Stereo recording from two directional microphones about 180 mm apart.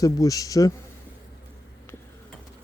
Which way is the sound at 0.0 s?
20° left (ahead or behind).